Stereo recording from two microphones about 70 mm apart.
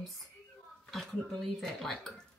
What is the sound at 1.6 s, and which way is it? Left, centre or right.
Speech, centre.